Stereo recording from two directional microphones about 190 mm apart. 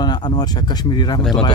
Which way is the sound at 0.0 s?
20° left (ahead or behind).